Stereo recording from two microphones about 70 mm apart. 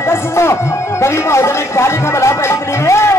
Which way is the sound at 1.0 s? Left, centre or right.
Left.